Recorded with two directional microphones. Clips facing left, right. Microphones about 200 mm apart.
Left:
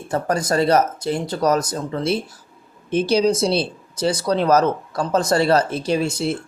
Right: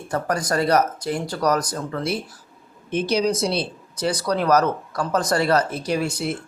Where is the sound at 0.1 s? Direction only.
25° left (ahead or behind).